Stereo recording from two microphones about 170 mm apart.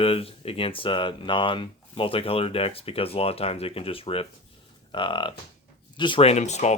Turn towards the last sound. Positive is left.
turn(degrees=40)  # may be behind; listen again after turning